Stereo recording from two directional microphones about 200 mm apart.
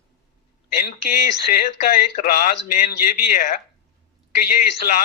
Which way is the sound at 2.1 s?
45° left (ahead or behind).